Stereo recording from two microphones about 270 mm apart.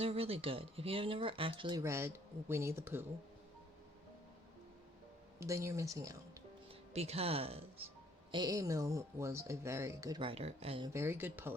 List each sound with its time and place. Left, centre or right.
0.0 s speech: right
5.4 s speech: centre
6.9 s speech: right